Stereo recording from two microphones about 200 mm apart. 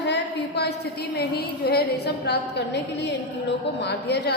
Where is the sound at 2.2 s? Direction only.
55° left (ahead or behind).